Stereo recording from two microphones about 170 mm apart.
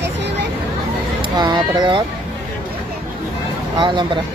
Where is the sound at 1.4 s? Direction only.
25° right (ahead or behind).